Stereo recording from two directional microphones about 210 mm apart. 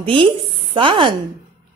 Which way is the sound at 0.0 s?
25° right (ahead or behind).